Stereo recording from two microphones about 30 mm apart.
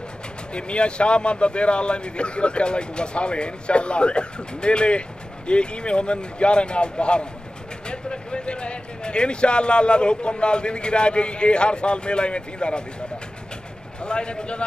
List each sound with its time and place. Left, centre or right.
0.5 s speech: left
14.0 s speech: left